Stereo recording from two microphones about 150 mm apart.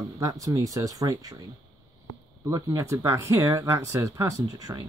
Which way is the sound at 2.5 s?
20° right (ahead or behind).